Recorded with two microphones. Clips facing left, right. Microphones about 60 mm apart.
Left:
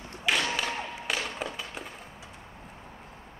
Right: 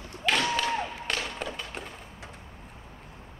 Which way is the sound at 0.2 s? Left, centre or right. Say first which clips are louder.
Right 2 dB; centre.